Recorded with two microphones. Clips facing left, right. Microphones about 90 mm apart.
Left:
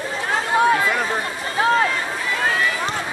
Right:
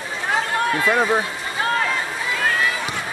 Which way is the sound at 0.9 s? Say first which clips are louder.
Right 4 dB; 25° right (ahead or behind).